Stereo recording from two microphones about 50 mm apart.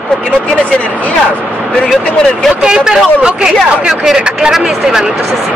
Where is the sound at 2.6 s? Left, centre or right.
Centre.